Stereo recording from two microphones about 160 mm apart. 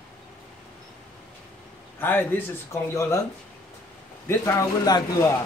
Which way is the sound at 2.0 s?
10° left (ahead or behind).